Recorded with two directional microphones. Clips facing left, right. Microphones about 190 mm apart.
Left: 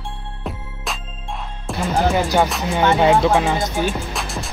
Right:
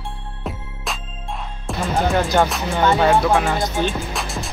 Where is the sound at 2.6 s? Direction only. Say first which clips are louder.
Left 1 dB; 15° left (ahead or behind).